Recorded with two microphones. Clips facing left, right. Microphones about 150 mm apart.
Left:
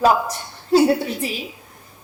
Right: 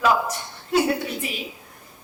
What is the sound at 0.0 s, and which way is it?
A woman's voice, 35° left (ahead or behind).